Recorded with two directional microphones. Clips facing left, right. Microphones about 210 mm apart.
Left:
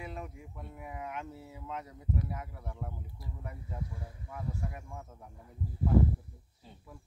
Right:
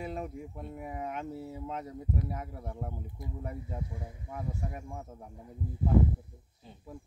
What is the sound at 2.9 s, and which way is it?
Speech, 20° right (ahead or behind).